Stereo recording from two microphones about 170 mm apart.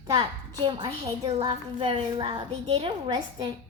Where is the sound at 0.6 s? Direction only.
30° right (ahead or behind).